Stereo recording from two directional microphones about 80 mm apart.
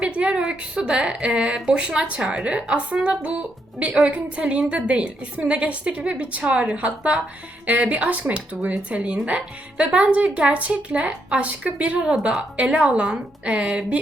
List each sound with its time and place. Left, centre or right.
0.0 s speech: centre